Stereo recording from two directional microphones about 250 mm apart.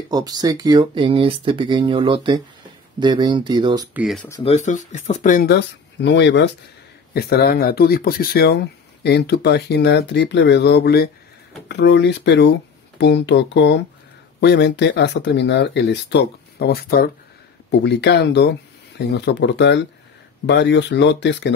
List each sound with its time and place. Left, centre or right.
0.1 s speech: centre
3.9 s speech: centre
4.3 s speech: left